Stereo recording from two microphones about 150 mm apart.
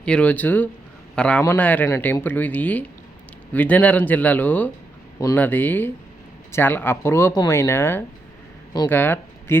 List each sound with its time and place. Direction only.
0.0 s a man's voice: 10° left (ahead or behind)